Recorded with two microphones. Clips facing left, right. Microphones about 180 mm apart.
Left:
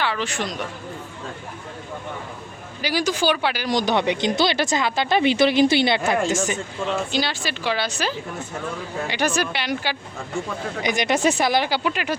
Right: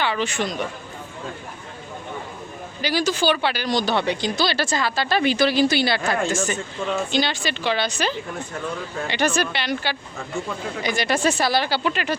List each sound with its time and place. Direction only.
0.0 s speech: centre (ahead or behind)
2.8 s speech: 10° left (ahead or behind)
7.1 s speech: 5° left (ahead or behind)